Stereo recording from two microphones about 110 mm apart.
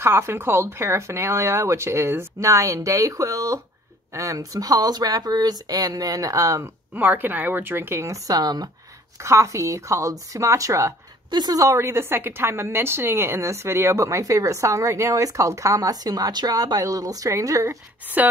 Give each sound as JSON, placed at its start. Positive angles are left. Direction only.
{"t": 0.0, "sound": "a woman's voice", "side_deg": -20}
{"t": 6.9, "sound": "a woman's voice", "side_deg": -15}
{"t": 11.2, "sound": "a woman's voice", "side_deg": -40}